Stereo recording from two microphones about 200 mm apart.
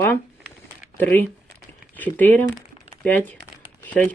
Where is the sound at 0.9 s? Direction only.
10° left (ahead or behind).